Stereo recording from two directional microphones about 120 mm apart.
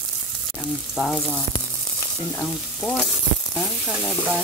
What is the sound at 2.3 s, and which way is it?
Speech, 10° left (ahead or behind).